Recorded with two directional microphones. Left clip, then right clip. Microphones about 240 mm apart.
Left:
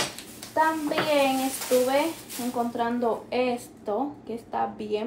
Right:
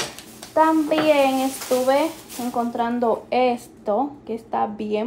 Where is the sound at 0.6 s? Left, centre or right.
Right.